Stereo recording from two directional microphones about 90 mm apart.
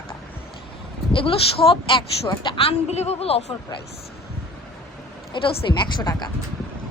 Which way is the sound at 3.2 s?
90° left.